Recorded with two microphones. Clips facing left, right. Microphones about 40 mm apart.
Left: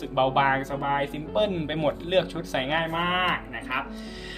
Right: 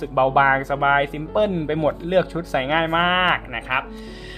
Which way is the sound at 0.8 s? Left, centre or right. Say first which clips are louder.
Right 9 dB; right.